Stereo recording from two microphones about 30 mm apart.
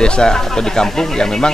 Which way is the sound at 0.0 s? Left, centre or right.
Left.